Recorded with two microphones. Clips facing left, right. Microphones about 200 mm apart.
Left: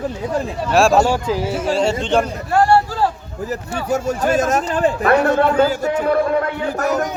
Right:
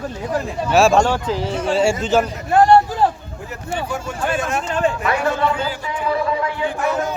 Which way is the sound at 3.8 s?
40° left (ahead or behind).